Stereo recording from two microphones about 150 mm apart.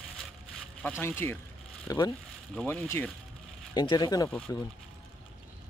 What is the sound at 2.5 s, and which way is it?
Speech, 15° left (ahead or behind).